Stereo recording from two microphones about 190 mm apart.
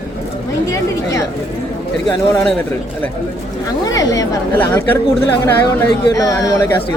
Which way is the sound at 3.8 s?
20° left (ahead or behind).